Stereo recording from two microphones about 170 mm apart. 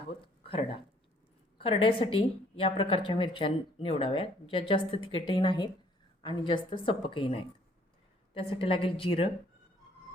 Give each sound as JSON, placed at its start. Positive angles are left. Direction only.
{"t": 0.4, "sound": "a woman's voice", "side_deg": 35}